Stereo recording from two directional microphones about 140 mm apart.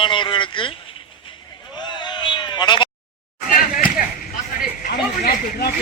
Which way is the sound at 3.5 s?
85° left.